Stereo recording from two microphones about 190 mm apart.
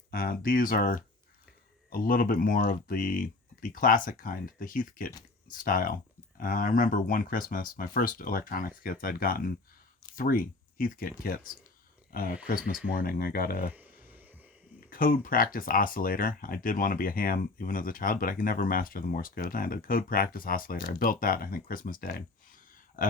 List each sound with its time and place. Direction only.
0.1 s speech: 50° left (ahead or behind)
13.7 s a sound: 10° right (ahead or behind)
14.8 s speech: 45° left (ahead or behind)